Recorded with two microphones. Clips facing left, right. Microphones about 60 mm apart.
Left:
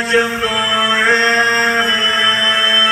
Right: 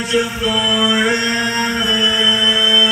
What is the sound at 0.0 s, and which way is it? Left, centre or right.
Mantra, left.